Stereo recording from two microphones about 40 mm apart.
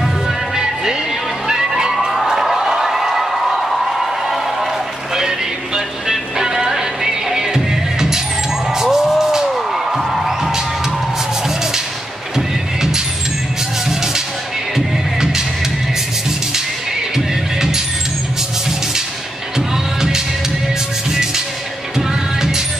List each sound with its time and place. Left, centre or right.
1.5 s a sound: centre
6.0 s music: centre
9.7 s music: centre
12.4 s music: centre
17.6 s vehicle: centre